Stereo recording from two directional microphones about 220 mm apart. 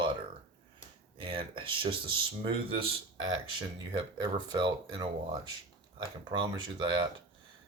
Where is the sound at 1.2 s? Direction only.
25° right (ahead or behind).